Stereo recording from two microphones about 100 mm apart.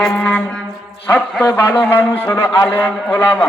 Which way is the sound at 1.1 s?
15° left (ahead or behind).